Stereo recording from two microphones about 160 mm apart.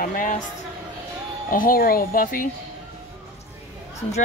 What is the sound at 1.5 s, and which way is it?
Speech, 60° left (ahead or behind).